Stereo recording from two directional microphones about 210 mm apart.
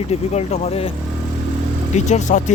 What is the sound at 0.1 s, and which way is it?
Speech, 30° left (ahead or behind).